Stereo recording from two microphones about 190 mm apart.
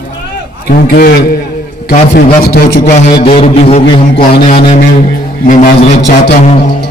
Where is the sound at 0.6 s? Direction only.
50° left (ahead or behind).